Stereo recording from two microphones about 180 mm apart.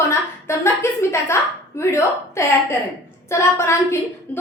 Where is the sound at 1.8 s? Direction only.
15° left (ahead or behind).